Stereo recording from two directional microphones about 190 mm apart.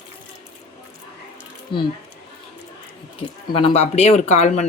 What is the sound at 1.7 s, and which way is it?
Speech, 25° left (ahead or behind).